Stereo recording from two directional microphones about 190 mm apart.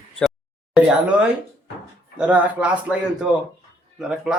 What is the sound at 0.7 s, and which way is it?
Speech, 5° right (ahead or behind).